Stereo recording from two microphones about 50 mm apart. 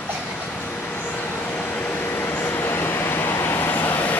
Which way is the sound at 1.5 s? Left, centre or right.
Left.